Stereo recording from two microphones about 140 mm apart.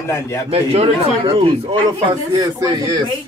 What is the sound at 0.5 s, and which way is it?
Speech, 45° right (ahead or behind).